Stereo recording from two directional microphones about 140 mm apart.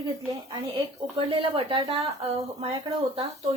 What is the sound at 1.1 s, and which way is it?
A woman's voice, 40° right (ahead or behind).